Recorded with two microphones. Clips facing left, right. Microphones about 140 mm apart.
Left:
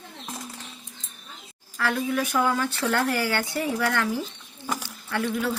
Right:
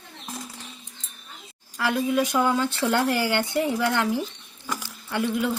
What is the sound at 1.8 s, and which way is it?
Speech, 15° right (ahead or behind).